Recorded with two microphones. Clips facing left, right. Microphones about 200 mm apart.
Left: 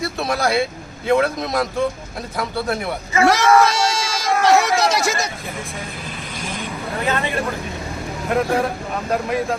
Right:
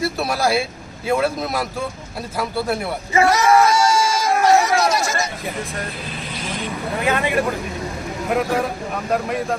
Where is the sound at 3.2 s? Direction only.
90° left.